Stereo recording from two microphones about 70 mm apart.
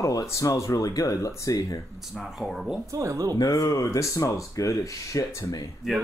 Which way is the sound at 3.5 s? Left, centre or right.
Left.